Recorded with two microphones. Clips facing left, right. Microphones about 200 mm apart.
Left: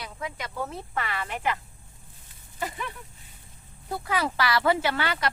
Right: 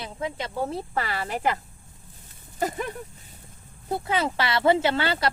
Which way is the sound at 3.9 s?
25° right (ahead or behind).